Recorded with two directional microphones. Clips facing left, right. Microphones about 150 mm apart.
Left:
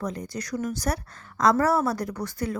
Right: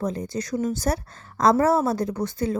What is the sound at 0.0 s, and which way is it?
A woman's voice, 25° right (ahead or behind).